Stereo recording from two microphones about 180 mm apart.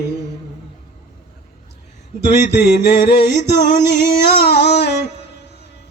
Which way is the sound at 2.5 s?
70° left (ahead or behind).